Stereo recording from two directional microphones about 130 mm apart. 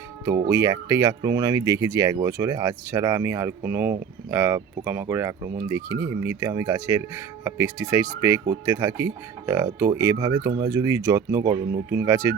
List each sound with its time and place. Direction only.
0.3 s speech: 25° right (ahead or behind)